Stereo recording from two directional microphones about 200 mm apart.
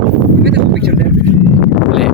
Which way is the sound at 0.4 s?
55° right (ahead or behind).